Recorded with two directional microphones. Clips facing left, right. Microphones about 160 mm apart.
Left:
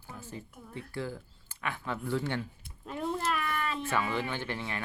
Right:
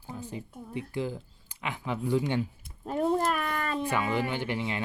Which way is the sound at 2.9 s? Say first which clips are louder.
Right 6 dB; 40° right (ahead or behind).